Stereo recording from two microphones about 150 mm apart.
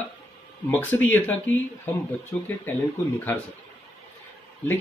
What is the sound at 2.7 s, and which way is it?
Speech, 15° left (ahead or behind).